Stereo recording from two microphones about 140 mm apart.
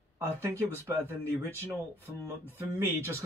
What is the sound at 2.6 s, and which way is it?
Speech, 15° right (ahead or behind).